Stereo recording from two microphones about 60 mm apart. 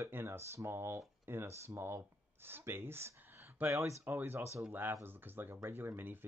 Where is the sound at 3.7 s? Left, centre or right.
Right.